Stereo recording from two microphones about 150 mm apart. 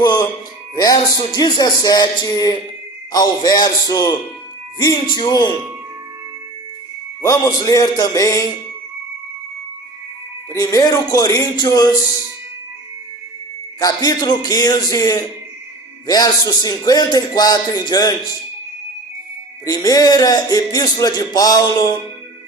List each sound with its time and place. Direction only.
0.0 s speech: 30° left (ahead or behind)
7.2 s speech: 25° left (ahead or behind)
10.5 s speech: 25° left (ahead or behind)
13.7 s speech: 25° left (ahead or behind)
19.6 s speech: 25° left (ahead or behind)